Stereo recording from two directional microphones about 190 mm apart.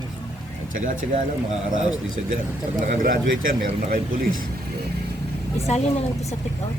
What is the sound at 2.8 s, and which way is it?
Speech, 45° right (ahead or behind).